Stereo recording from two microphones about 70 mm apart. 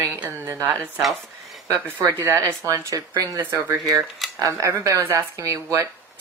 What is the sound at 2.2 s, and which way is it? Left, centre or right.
Speech, right.